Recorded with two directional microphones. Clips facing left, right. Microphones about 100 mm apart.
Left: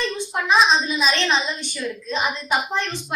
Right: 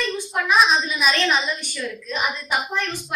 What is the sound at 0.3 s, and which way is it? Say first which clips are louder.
Speech: right 2 dB; 25° left (ahead or behind).